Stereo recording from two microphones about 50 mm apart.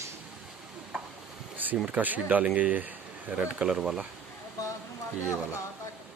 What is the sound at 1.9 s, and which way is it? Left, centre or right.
Speech, right.